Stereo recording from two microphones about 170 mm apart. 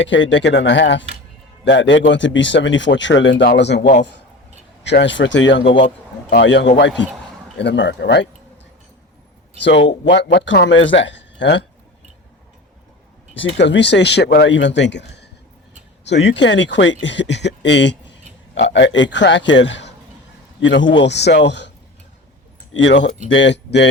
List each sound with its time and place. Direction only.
0.0 s speech: 90° left
9.6 s speech: 90° left
13.3 s speech: 90° left
22.7 s speech: 90° left